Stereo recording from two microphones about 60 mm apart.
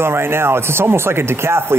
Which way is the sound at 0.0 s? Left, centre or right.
Right.